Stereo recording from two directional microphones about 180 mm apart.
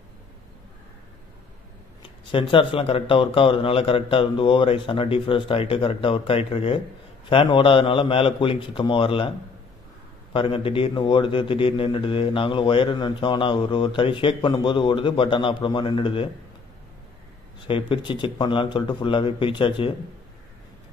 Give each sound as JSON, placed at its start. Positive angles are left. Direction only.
{"t": 2.3, "sound": "a man's voice", "side_deg": 30}
{"t": 10.3, "sound": "a man's voice", "side_deg": 30}
{"t": 17.6, "sound": "a man's voice", "side_deg": 30}